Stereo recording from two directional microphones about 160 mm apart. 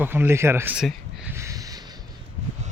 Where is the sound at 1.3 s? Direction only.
20° right (ahead or behind).